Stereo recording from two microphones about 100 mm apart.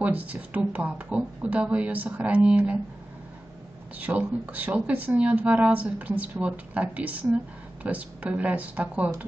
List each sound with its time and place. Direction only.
0.0 s speech: 15° right (ahead or behind)
4.0 s speech: 15° right (ahead or behind)